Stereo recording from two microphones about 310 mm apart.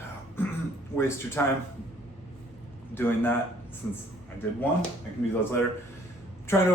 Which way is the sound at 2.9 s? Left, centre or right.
Centre.